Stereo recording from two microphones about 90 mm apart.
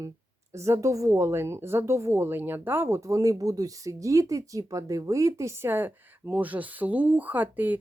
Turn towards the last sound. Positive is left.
turn(degrees=-20)  # may be behind; listen again after turning